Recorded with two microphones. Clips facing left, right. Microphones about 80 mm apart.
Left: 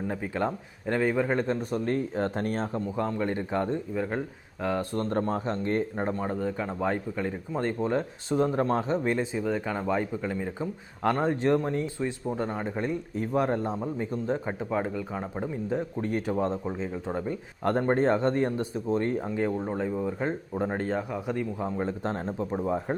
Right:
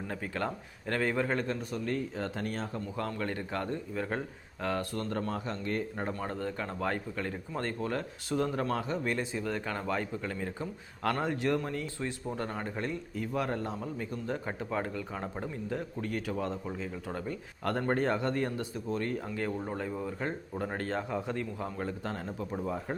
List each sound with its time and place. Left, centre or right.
0.1 s speech: centre
1.4 s speech: left
2.8 s a man's voice: centre
3.9 s speech: centre
4.9 s speech: left
6.2 s speech: centre
13.1 s a man's voice: left